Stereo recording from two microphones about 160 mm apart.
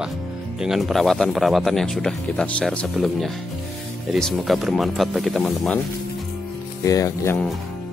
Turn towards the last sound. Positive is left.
turn(degrees=15)  # may be behind; listen again after turning